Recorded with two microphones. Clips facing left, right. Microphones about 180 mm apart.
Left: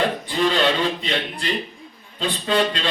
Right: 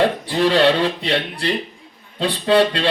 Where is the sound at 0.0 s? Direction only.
65° right (ahead or behind).